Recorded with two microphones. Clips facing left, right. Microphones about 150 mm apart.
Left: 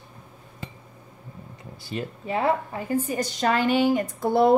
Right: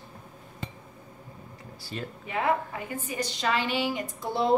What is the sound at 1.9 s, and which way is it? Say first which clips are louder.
Speech: left 5 dB; 20° left (ahead or behind).